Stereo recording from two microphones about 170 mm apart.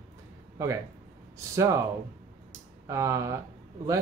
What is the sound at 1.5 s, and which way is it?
Speech, 20° right (ahead or behind).